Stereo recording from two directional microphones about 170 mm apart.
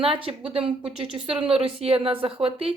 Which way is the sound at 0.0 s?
30° right (ahead or behind).